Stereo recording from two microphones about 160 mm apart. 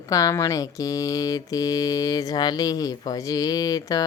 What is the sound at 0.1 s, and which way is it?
Mantra, 20° left (ahead or behind).